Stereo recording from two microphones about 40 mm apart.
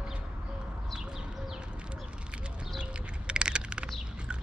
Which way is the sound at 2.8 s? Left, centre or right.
Right.